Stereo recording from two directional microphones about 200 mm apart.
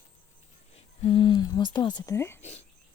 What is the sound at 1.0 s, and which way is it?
Speech, 25° left (ahead or behind).